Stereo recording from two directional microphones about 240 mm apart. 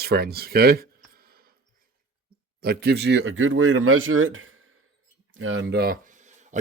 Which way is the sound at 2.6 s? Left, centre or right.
Right.